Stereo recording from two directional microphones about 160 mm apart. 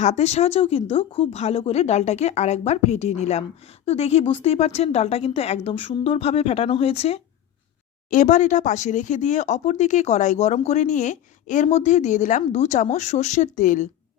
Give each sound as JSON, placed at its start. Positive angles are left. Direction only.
{"t": 0.0, "sound": "speech", "side_deg": 45}
{"t": 8.1, "sound": "speech", "side_deg": 50}